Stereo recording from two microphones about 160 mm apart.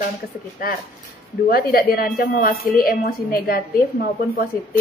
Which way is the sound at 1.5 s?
65° left (ahead or behind).